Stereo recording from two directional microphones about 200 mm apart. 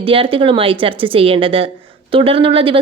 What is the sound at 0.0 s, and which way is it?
Speech, 25° right (ahead or behind).